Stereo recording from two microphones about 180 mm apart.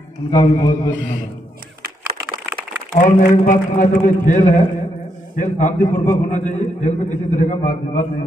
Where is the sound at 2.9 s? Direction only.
45° left (ahead or behind).